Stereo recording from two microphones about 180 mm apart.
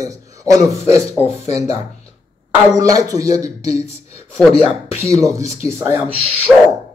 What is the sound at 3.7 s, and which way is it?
Speech, 35° left (ahead or behind).